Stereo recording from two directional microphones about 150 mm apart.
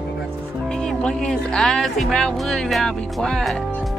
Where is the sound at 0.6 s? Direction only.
5° left (ahead or behind).